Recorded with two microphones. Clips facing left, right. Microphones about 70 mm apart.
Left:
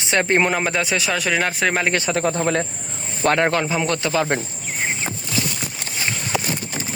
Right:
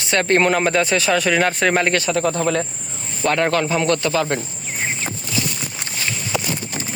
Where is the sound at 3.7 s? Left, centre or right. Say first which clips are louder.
Right 3 dB; centre.